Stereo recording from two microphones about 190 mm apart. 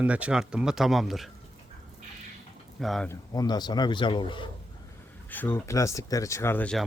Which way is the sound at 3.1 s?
20° left (ahead or behind).